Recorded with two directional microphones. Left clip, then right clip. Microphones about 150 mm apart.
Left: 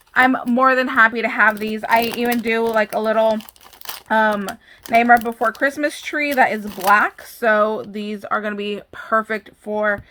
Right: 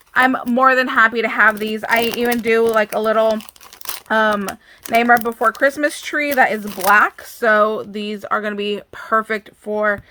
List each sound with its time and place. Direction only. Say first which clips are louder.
0.1 s speech: even; 35° right (ahead or behind)
6.7 s speech: right 1 dB; 20° right (ahead or behind)
6.9 s speech: right 2 dB; 40° right (ahead or behind)